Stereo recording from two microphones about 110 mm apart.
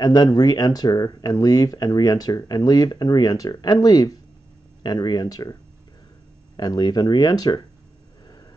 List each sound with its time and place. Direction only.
0.0 s speech: 40° left (ahead or behind)